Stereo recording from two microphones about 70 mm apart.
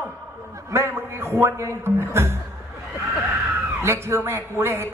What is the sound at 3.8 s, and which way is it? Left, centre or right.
A man's voice, right.